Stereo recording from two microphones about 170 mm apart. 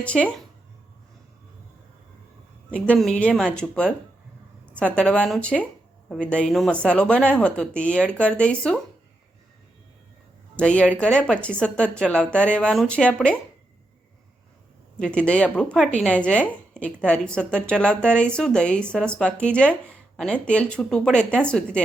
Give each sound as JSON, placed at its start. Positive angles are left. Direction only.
{"t": 0.0, "sound": "a woman's voice", "side_deg": 10}
{"t": 2.7, "sound": "a woman's voice", "side_deg": 5}
{"t": 10.6, "sound": "a woman's voice", "side_deg": 5}
{"t": 14.9, "sound": "a woman's voice", "side_deg": 5}